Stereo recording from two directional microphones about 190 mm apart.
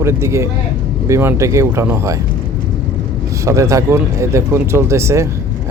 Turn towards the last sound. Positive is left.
turn(degrees=-15)  # may be behind; listen again after turning